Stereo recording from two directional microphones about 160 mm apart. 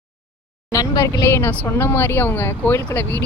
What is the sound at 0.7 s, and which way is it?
Speech, 20° left (ahead or behind).